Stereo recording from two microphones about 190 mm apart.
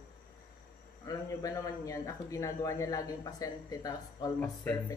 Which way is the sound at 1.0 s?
20° left (ahead or behind).